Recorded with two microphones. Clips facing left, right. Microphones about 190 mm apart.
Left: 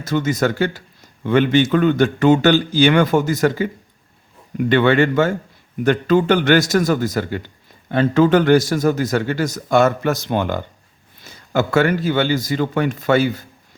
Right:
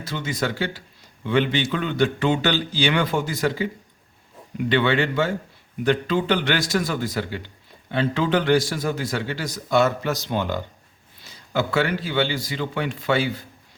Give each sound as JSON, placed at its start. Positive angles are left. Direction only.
{"t": 0.0, "sound": "a man's voice", "side_deg": 45}